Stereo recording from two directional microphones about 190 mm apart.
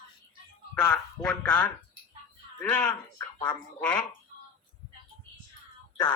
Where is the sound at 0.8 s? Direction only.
15° left (ahead or behind).